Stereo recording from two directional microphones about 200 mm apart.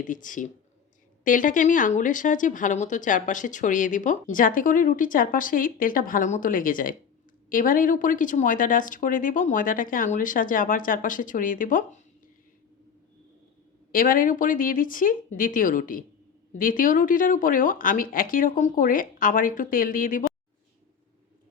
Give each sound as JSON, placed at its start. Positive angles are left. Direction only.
{"t": 0.0, "sound": "speech", "side_deg": 40}
{"t": 13.9, "sound": "speech", "side_deg": 45}